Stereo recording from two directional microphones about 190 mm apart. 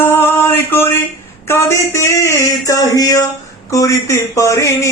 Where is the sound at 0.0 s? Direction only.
10° left (ahead or behind).